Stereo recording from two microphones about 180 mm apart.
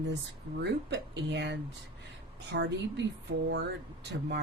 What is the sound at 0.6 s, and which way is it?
Speech, 75° right (ahead or behind).